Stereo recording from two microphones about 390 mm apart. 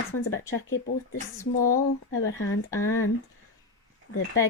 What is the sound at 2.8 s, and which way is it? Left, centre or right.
Speech, left.